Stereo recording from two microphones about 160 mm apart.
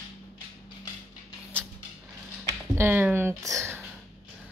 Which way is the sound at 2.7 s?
15° right (ahead or behind).